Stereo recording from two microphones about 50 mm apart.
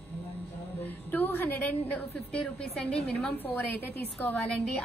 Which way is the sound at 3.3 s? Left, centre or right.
Left.